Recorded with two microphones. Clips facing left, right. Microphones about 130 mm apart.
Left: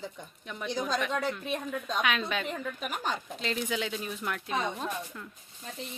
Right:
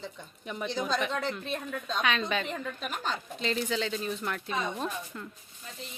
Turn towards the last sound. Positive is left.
turn(degrees=0)  # may be behind; listen again after turning